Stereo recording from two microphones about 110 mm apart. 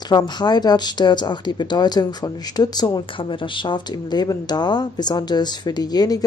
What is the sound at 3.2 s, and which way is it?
Speech, 50° left (ahead or behind).